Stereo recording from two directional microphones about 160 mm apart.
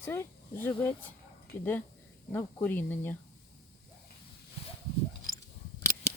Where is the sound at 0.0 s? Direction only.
15° left (ahead or behind).